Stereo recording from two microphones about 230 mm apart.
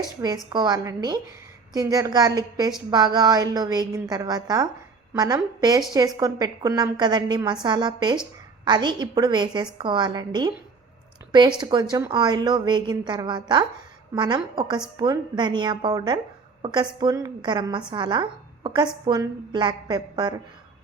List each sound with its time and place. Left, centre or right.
0.5 s a woman's voice: centre